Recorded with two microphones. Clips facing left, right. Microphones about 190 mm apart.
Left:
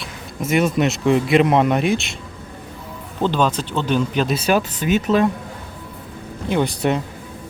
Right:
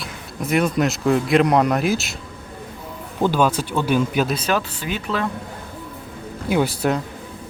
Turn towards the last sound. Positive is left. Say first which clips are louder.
# even
turn(degrees=-5)  # may be behind; listen again after turning